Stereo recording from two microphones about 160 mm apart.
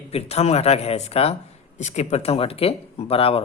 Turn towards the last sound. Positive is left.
turn(degrees=35)  # may be behind; listen again after turning